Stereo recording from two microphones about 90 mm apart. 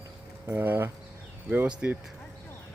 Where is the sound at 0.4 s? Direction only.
25° right (ahead or behind).